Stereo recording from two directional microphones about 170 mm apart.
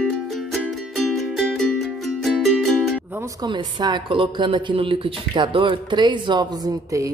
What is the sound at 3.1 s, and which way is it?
A woman's voice, 15° right (ahead or behind).